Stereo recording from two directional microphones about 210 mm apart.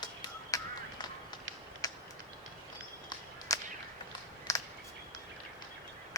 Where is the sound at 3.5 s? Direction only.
15° left (ahead or behind).